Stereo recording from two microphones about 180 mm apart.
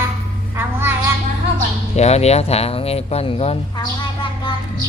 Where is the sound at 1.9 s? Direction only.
35° left (ahead or behind).